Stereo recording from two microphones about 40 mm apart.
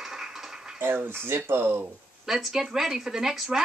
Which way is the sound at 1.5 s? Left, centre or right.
Right.